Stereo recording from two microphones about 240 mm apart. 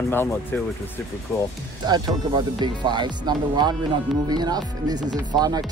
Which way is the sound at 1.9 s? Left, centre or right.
Centre.